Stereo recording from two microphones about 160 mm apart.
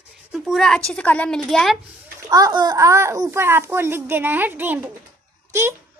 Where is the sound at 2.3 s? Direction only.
25° right (ahead or behind).